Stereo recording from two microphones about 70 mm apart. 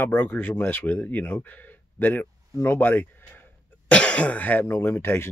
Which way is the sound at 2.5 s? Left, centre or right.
Left.